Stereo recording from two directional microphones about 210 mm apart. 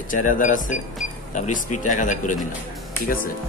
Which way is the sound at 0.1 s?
40° left (ahead or behind).